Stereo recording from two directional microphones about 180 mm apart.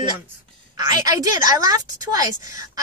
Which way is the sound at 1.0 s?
20° right (ahead or behind).